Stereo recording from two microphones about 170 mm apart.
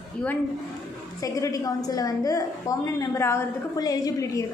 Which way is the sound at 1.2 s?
20° left (ahead or behind).